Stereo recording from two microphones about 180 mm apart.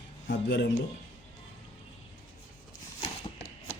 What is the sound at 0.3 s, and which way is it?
Speech, 65° left (ahead or behind).